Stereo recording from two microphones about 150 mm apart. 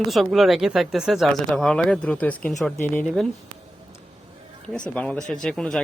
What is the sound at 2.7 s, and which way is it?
Speech, 15° left (ahead or behind).